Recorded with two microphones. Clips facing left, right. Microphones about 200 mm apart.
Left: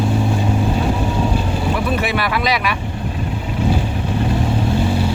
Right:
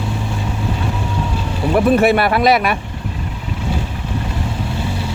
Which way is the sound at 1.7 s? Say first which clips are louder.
Right 11 dB; 50° right (ahead or behind).